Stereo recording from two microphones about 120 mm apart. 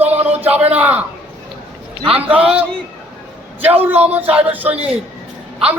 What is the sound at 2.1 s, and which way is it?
A man's voice, 10° right (ahead or behind).